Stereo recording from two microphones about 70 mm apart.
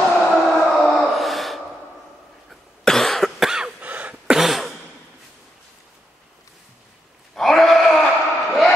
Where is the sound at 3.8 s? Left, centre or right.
Right.